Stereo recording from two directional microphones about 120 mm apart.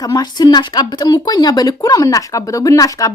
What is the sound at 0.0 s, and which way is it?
Speech, 35° left (ahead or behind).